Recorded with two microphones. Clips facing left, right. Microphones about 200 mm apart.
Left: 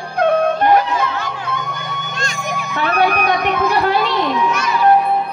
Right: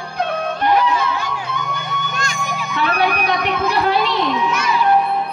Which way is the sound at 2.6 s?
50° left (ahead or behind).